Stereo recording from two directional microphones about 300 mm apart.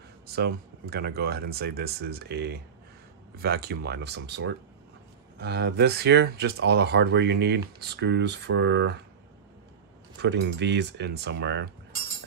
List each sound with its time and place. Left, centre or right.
0.3 s speech: right
10.2 s speech: right